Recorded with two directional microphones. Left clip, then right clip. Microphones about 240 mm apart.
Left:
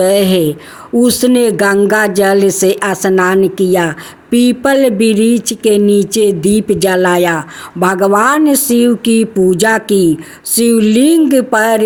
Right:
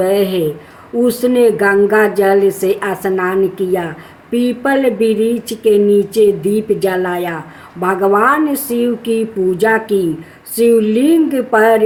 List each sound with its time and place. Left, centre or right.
0.0 s speech: left